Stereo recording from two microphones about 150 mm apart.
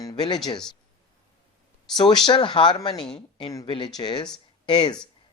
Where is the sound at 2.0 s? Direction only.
30° left (ahead or behind).